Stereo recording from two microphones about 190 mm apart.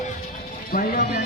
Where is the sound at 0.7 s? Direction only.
45° left (ahead or behind).